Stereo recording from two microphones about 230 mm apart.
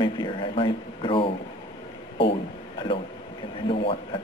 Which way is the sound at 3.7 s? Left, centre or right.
Left.